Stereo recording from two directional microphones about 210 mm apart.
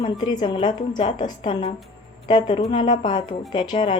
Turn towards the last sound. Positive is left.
turn(degrees=20)  # may be behind; listen again after turning